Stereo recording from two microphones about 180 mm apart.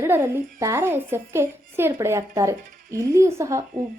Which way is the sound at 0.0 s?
15° right (ahead or behind).